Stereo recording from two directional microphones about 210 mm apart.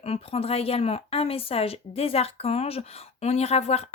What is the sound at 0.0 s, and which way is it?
A woman's voice, 30° left (ahead or behind).